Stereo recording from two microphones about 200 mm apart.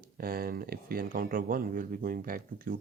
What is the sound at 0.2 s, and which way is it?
Speech, 50° right (ahead or behind).